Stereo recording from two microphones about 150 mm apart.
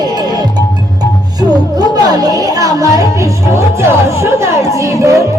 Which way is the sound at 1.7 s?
25° right (ahead or behind).